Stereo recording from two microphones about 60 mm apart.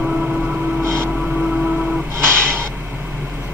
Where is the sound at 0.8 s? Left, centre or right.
Right.